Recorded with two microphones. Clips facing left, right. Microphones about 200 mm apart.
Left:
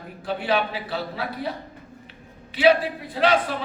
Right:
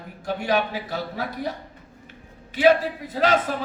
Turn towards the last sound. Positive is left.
turn(degrees=-40)  # may be behind; listen again after turning